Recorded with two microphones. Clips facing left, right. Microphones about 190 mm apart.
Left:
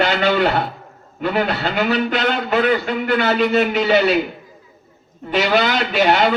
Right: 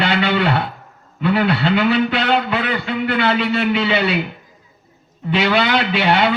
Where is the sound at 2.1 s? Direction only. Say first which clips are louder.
Right 2 dB; 60° right (ahead or behind).